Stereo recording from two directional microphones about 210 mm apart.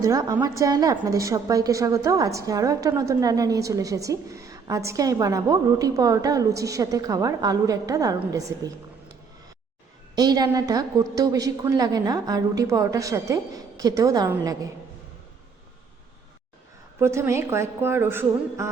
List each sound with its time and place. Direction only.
0.0 s a woman's voice: 15° right (ahead or behind)
10.2 s a woman's voice: 20° right (ahead or behind)
17.0 s a woman's voice: 10° right (ahead or behind)